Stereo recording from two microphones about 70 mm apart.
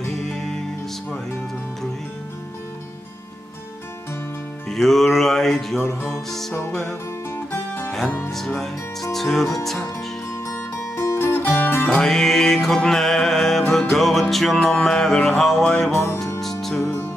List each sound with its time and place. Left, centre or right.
0.1 s music: centre
4.6 s music: centre
7.2 s music: left
8.3 s music: centre
10.4 s music: left
12.0 s music: centre
15.9 s music: left
16.3 s music: centre